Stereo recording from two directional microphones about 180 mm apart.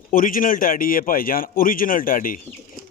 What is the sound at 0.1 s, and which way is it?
Speech, 50° left (ahead or behind).